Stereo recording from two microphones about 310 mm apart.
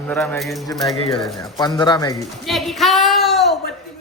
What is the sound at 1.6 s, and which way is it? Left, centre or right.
Speech, centre.